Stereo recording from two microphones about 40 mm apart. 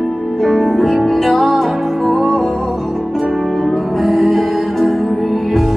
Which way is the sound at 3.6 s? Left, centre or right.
Centre.